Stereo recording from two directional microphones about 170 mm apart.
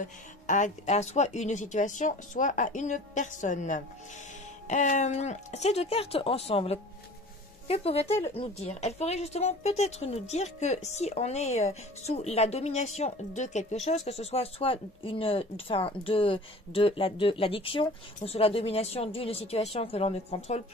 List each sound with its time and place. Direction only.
0.0 s a woman's voice: 50° left (ahead or behind)